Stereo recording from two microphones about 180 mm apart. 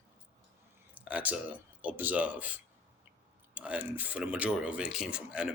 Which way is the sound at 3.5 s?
10° right (ahead or behind).